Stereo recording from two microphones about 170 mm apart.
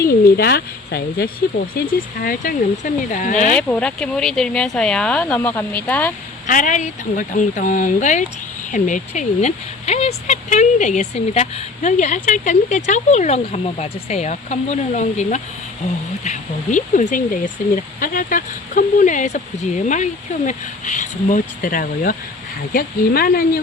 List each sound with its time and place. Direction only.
0.1 s speech: 60° left (ahead or behind)
3.5 s speech: 10° left (ahead or behind)
6.5 s speech: 50° left (ahead or behind)